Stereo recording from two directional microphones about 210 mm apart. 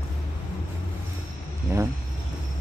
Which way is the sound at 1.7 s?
15° right (ahead or behind).